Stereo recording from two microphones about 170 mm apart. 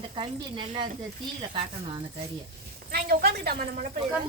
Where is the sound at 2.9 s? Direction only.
65° right (ahead or behind).